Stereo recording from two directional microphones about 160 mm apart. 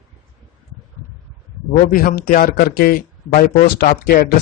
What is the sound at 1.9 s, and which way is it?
Speech, 65° left (ahead or behind).